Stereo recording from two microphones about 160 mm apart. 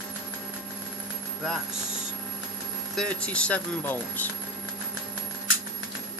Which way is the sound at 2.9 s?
5° left (ahead or behind).